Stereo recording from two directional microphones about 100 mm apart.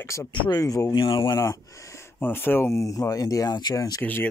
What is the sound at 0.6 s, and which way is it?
Speech, 35° left (ahead or behind).